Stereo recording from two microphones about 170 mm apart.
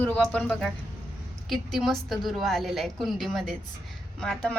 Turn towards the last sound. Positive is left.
turn(degrees=5)  # may be behind; listen again after turning